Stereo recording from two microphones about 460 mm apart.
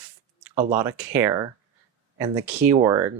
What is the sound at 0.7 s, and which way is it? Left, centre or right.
Speech, centre.